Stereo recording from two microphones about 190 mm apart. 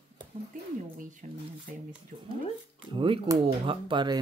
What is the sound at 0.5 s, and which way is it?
Speech, 45° right (ahead or behind).